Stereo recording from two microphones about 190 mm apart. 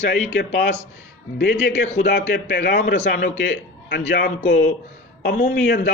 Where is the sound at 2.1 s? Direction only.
65° left (ahead or behind).